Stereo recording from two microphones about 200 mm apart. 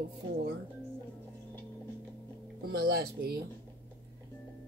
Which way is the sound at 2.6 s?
50° right (ahead or behind).